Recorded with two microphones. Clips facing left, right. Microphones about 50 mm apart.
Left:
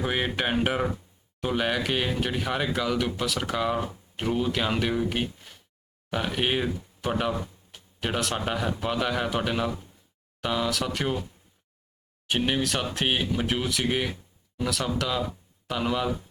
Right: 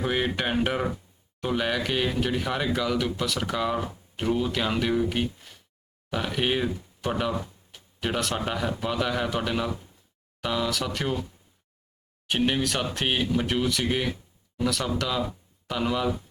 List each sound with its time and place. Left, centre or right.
0.0 s speech: centre
12.3 s speech: centre